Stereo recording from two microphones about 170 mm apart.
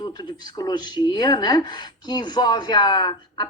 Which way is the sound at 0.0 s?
25° left (ahead or behind).